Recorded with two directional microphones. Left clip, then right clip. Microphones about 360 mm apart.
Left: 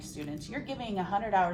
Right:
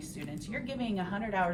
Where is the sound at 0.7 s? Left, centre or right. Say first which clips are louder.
Left 7 dB; centre.